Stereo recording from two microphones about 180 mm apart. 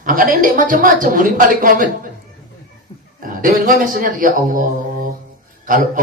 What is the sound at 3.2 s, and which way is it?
A man's voice, 50° right (ahead or behind).